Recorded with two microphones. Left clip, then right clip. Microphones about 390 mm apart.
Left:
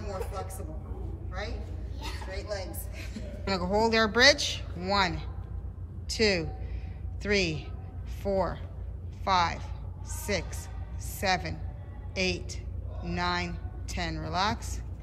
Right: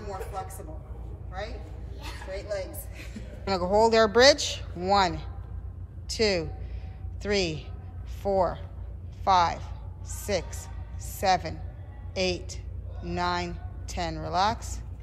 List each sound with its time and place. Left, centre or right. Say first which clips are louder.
0.0 s vehicle: even; centre
3.4 s a woman's voice: right 5 dB; centre